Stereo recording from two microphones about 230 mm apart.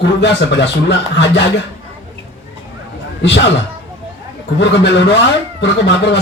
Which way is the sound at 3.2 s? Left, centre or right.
Left.